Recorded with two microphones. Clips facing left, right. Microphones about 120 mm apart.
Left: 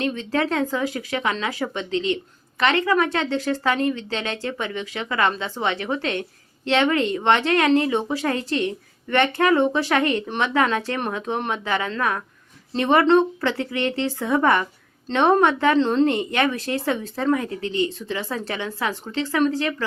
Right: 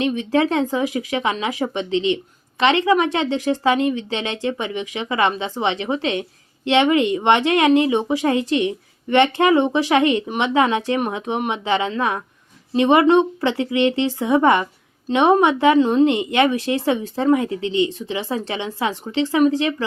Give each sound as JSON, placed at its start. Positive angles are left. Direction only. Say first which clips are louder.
{"t": 0.0, "sound": "a woman's voice", "louder": "right 5 dB", "side_deg": -15}
{"t": 16.0, "sound": "speech", "louder": "right 4 dB", "side_deg": -20}